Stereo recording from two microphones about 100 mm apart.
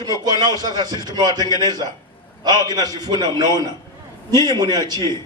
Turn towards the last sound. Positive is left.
turn(degrees=-45)  # may be behind; listen again after turning